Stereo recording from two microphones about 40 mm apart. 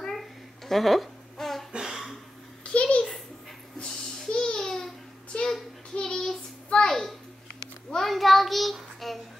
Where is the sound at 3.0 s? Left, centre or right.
Centre.